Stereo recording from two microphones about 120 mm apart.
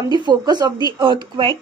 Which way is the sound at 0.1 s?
40° right (ahead or behind).